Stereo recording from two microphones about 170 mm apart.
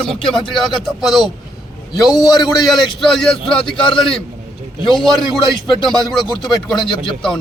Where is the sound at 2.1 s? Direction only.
20° left (ahead or behind).